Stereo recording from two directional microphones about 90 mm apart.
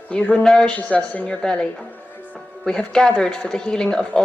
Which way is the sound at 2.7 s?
10° left (ahead or behind).